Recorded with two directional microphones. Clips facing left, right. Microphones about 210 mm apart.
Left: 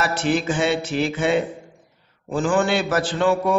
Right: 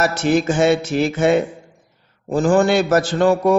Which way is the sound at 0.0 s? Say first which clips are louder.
Right 4 dB; 45° right (ahead or behind).